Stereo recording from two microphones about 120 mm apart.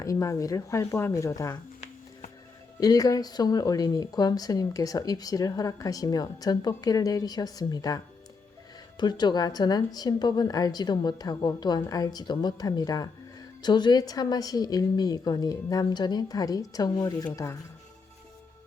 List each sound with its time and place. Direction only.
0.0 s speech: 25° left (ahead or behind)
2.8 s speech: 30° left (ahead or behind)